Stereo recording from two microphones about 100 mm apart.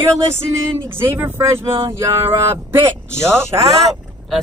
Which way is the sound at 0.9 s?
20° right (ahead or behind).